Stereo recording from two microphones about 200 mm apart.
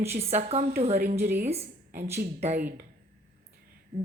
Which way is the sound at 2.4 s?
35° right (ahead or behind).